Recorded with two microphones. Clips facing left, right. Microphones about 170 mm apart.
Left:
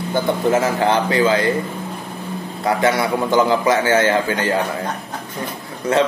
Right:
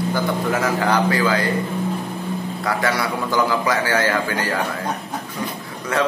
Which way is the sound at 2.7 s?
25° left (ahead or behind).